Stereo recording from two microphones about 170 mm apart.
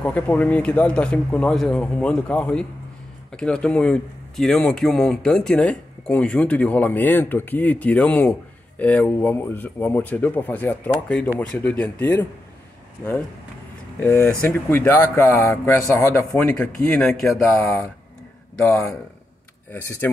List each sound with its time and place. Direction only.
0.0 s a man's voice: 5° left (ahead or behind)
13.9 s a man's voice: 15° left (ahead or behind)